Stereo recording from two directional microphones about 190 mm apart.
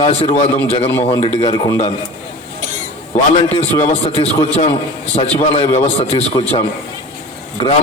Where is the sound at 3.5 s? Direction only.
35° left (ahead or behind).